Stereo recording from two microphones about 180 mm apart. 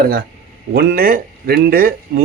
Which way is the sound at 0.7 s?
60° right (ahead or behind).